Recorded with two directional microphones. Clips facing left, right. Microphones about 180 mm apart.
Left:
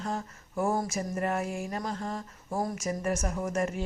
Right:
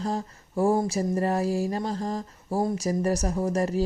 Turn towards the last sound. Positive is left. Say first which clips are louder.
# right 5 dB
turn(degrees=-35)  # may be behind; listen again after turning